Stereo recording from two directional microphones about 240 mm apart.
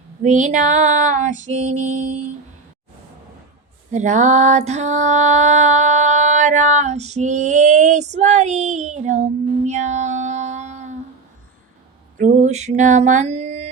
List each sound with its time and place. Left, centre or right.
0.2 s female singing: right
3.9 s music: right
12.1 s mantra: right